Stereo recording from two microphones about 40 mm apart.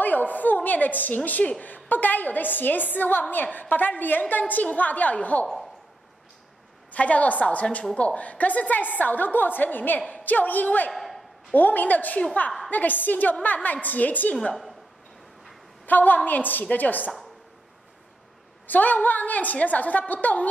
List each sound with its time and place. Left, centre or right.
0.0 s a woman's voice: left
6.9 s a woman's voice: left
10.9 s a sound: centre
11.5 s a woman's voice: left
15.8 s a woman's voice: left
18.7 s a woman's voice: left